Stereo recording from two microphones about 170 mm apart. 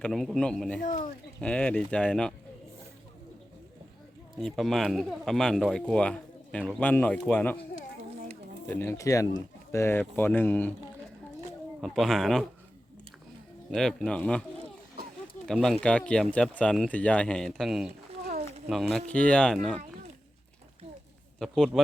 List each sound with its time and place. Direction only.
0.0 s speech: centre (ahead or behind)
0.8 s speech: 50° left (ahead or behind)
1.4 s speech: 5° left (ahead or behind)
4.4 s speech: centre (ahead or behind)
8.6 s speech: 10° left (ahead or behind)
11.8 s speech: centre (ahead or behind)
13.7 s speech: 5° left (ahead or behind)
15.5 s speech: centre (ahead or behind)
21.3 s speech: centre (ahead or behind)